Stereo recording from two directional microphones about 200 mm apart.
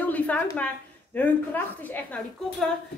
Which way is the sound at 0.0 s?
10° left (ahead or behind).